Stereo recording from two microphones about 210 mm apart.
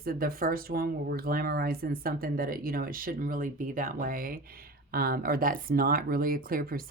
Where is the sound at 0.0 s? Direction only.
45° right (ahead or behind).